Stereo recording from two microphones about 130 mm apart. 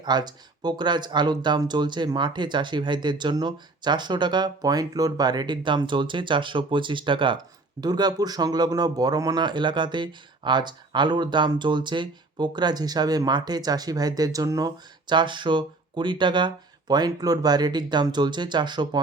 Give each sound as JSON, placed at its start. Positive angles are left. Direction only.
{"t": 0.0, "sound": "speech", "side_deg": -35}